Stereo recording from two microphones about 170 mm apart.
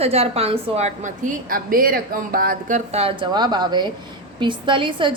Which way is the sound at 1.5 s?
55° right (ahead or behind).